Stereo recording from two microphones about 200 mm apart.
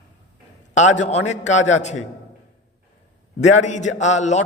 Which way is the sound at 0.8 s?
35° left (ahead or behind).